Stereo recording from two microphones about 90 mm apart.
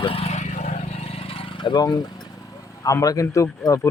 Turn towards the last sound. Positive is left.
turn(degrees=35)  # may be behind; listen again after turning